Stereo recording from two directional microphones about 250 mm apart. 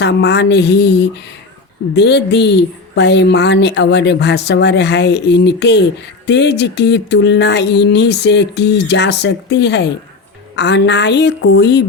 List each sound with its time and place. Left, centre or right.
0.0 s speech: left